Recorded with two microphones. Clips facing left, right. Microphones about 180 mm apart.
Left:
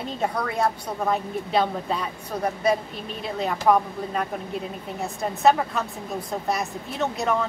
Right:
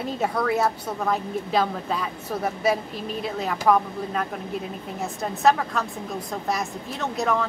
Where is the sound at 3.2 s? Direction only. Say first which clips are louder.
Left 1 dB; centre (ahead or behind).